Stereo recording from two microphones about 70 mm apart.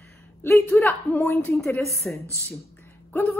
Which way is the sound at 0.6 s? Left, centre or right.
Left.